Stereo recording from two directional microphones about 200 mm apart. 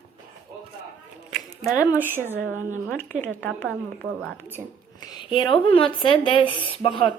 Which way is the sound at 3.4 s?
10° left (ahead or behind).